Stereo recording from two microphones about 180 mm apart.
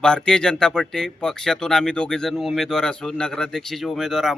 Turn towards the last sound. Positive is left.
turn(degrees=0)  # may be behind; listen again after turning